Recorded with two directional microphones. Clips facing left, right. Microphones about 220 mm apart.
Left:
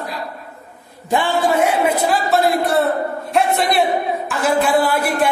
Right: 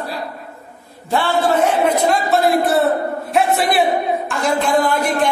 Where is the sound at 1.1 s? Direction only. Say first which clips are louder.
Even; 10° left (ahead or behind).